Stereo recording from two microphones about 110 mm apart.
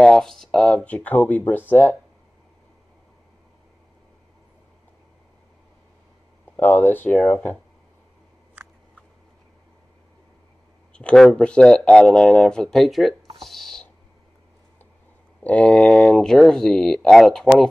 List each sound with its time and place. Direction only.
0.0 s speech: 5° left (ahead or behind)
6.5 s speech: 20° left (ahead or behind)
10.9 s speech: 10° left (ahead or behind)
13.4 s a sound: centre (ahead or behind)
15.4 s speech: 10° left (ahead or behind)